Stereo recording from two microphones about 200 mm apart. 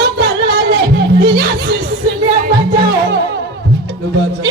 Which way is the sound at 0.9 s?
55° right (ahead or behind).